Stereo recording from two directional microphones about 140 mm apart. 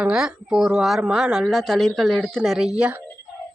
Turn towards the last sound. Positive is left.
turn(degrees=-10)  # may be behind; listen again after turning